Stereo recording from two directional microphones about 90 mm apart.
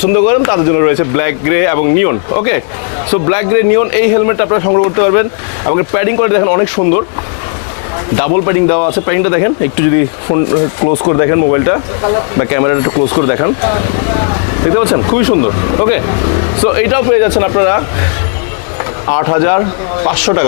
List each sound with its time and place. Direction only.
0.0 s speech: 20° left (ahead or behind)
8.1 s speech: 25° left (ahead or behind)
11.2 s speech: 25° left (ahead or behind)
15.4 s speech: 35° left (ahead or behind)
15.9 s speech: 25° left (ahead or behind)
19.1 s speech: 25° left (ahead or behind)